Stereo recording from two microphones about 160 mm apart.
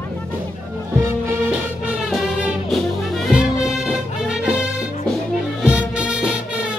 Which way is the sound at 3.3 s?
5° right (ahead or behind).